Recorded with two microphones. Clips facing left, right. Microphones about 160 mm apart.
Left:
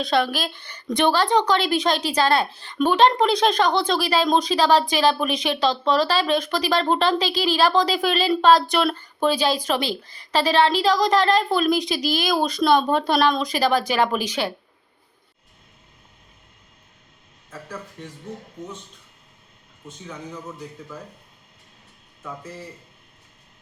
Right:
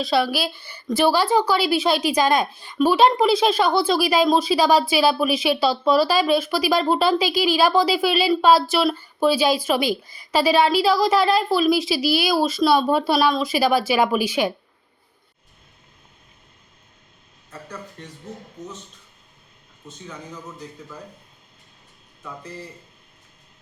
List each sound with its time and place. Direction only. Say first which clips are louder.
0.0 s a woman's voice: right 1 dB; 5° right (ahead or behind)
18.0 s speech: left 2 dB; 10° left (ahead or behind)
22.2 s speech: even; centre (ahead or behind)